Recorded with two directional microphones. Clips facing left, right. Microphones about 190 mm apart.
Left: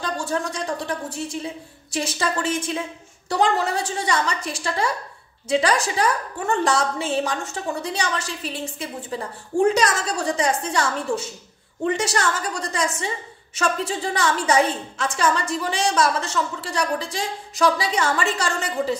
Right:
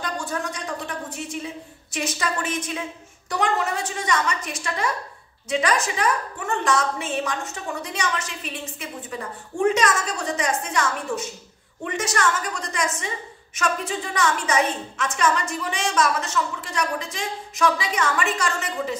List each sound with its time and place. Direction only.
0.0 s a woman's voice: 30° left (ahead or behind)